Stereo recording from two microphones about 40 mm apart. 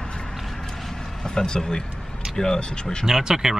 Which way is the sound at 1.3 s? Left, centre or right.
Centre.